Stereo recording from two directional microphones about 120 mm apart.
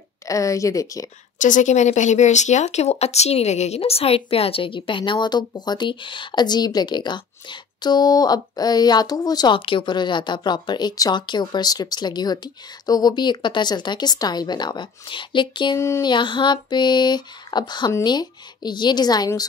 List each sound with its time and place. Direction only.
0.3 s speech: 25° left (ahead or behind)
1.4 s speech: 90° left; by 19.4 s 35° left (ahead or behind)